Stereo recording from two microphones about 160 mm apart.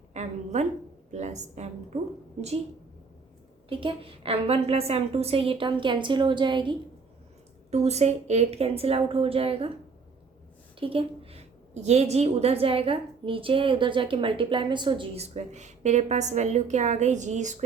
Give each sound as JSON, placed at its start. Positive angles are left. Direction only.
{"t": 0.1, "sound": "a woman's voice", "side_deg": -45}
{"t": 3.7, "sound": "a woman's voice", "side_deg": -35}
{"t": 7.7, "sound": "a woman's voice", "side_deg": -45}
{"t": 10.8, "sound": "a woman's voice", "side_deg": -35}